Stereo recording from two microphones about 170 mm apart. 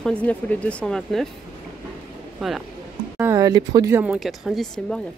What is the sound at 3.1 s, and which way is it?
Speech, 15° right (ahead or behind).